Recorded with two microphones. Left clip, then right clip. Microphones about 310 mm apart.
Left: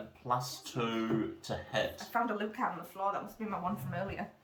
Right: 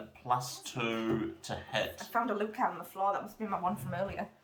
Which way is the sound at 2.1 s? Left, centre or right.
Centre.